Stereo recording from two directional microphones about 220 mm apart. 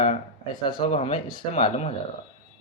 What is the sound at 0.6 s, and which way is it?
Speech, 20° left (ahead or behind).